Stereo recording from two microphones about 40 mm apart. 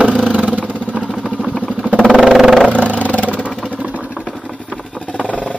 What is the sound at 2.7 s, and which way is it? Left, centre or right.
Vehicle, right.